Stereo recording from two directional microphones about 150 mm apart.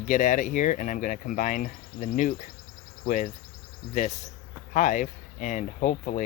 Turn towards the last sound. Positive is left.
turn(degrees=60)  # may be behind; listen again after turning